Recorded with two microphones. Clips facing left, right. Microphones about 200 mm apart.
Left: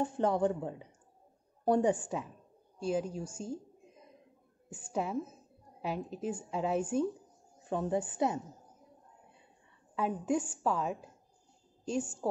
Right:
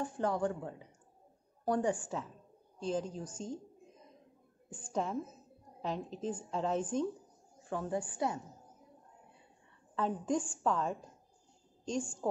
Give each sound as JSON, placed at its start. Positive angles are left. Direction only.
{"t": 0.0, "sound": "a woman's voice", "side_deg": 25}
{"t": 4.6, "sound": "a woman's voice", "side_deg": 10}
{"t": 7.6, "sound": "speech", "side_deg": 20}
{"t": 9.9, "sound": "a woman's voice", "side_deg": 10}